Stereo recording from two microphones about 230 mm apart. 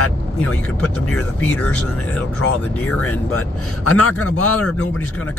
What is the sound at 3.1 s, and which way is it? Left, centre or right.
A man's voice, left.